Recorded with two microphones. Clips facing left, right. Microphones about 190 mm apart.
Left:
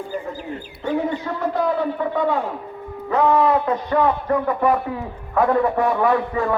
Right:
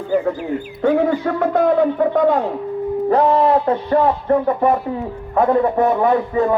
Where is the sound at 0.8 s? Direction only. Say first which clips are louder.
Right 7 dB; 85° right.